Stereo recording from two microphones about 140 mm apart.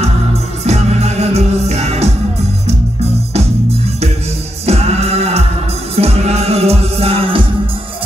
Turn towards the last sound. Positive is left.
turn(degrees=-40)  # may be behind; listen again after turning